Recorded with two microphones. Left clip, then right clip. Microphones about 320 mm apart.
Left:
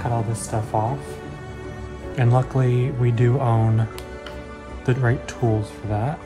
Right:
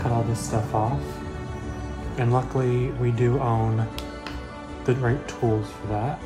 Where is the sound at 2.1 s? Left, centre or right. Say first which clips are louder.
Left 2 dB; left.